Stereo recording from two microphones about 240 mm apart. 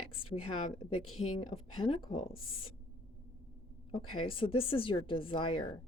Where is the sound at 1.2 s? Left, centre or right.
Left.